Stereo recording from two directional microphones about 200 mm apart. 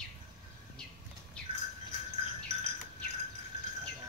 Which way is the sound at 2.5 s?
35° right (ahead or behind).